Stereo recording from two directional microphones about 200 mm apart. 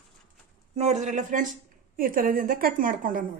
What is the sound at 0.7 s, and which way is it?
A woman's voice, 35° right (ahead or behind).